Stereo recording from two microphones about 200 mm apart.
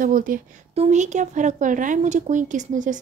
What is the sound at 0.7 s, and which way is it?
A woman's voice, 35° right (ahead or behind).